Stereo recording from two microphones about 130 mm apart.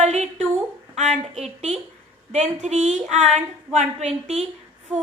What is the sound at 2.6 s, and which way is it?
A woman's voice, 65° right (ahead or behind).